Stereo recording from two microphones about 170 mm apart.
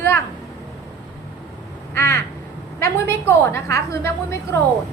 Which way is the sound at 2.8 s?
15° left (ahead or behind).